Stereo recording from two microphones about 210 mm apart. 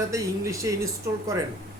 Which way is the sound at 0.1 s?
15° right (ahead or behind).